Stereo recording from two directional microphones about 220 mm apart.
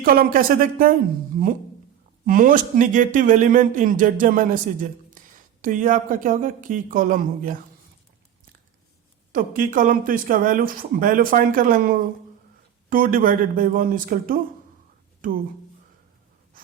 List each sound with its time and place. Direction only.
0.0 s speech: 40° right (ahead or behind)
9.3 s speech: 40° right (ahead or behind)